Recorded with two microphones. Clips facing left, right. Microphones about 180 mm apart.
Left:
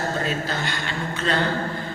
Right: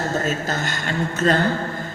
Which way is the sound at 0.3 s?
45° right (ahead or behind).